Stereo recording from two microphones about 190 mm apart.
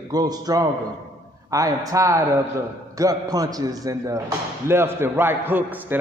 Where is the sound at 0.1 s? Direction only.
20° right (ahead or behind).